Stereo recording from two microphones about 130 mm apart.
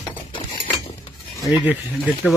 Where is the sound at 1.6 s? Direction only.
10° right (ahead or behind).